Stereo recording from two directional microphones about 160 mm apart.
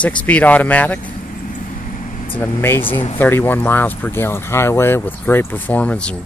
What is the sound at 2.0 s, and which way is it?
Vehicle, 55° left (ahead or behind).